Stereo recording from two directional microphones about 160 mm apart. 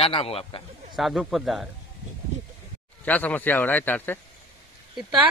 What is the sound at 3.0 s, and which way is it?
A man's voice, 10° left (ahead or behind).